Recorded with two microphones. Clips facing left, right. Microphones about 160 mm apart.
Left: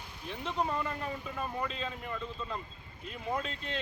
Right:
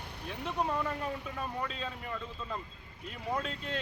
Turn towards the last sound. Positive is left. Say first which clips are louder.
# even
turn(degrees=0)  # may be behind; listen again after turning